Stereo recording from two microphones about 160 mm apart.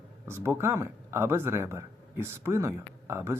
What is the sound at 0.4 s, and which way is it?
Speech, 15° right (ahead or behind).